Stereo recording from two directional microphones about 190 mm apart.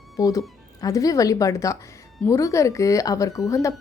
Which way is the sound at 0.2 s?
15° left (ahead or behind).